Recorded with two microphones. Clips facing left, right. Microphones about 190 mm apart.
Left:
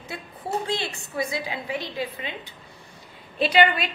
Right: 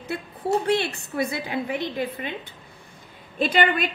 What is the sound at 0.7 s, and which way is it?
A woman's voice, 65° right (ahead or behind).